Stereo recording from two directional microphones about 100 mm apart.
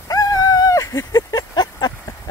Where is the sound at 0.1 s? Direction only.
40° left (ahead or behind).